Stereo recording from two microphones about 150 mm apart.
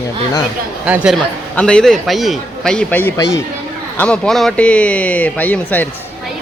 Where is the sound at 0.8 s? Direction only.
10° right (ahead or behind).